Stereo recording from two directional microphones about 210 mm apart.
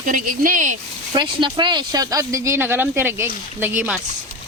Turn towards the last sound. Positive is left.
turn(degrees=-10)  # may be behind; listen again after turning